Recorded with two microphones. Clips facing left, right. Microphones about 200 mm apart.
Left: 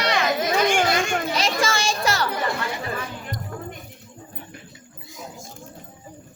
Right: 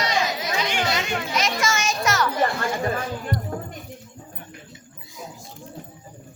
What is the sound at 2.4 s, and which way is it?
Chatter, 50° right (ahead or behind).